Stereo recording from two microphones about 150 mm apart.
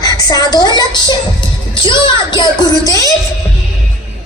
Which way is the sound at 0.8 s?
30° left (ahead or behind).